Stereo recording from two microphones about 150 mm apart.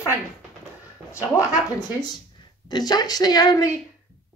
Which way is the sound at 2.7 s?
25° left (ahead or behind).